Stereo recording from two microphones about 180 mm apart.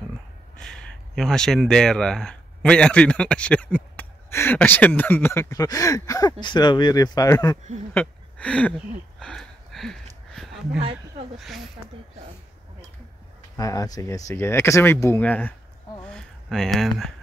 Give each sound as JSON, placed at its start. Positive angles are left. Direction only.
{"t": 0.6, "sound": "speech", "side_deg": 5}
{"t": 7.9, "sound": "speech", "side_deg": 5}
{"t": 9.2, "sound": "a sound", "side_deg": 5}
{"t": 11.3, "sound": "speech", "side_deg": 0}
{"t": 13.6, "sound": "speech", "side_deg": 20}
{"t": 16.0, "sound": "a sound", "side_deg": 5}